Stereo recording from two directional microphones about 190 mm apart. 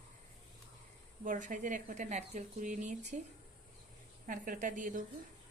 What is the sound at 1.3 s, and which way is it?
A woman's voice, 45° right (ahead or behind).